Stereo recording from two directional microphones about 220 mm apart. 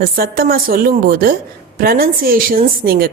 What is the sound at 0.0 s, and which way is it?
A woman's voice, 45° right (ahead or behind).